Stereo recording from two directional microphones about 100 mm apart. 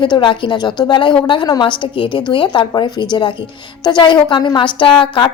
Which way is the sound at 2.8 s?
45° left (ahead or behind).